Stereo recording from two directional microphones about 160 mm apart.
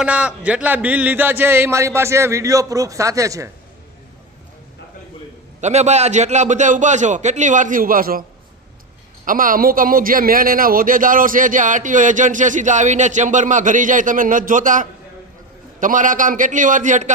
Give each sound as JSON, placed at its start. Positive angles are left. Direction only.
{"t": 0.0, "sound": "speech", "side_deg": -10}
{"t": 5.5, "sound": "a man's voice", "side_deg": -45}
{"t": 9.2, "sound": "a man's voice", "side_deg": -60}